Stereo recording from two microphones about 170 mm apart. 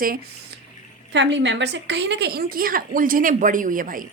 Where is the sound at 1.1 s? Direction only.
90° right; by 4.0 s 55° right (ahead or behind).